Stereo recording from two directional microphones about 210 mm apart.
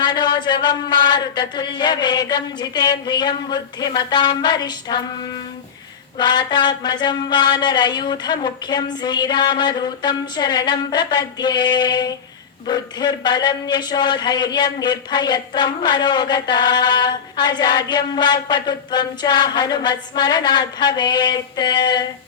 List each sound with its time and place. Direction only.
0.0 s speech: 20° left (ahead or behind)
6.1 s speech: 20° left (ahead or behind)